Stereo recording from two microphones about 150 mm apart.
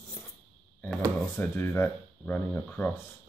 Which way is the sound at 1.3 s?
15° left (ahead or behind).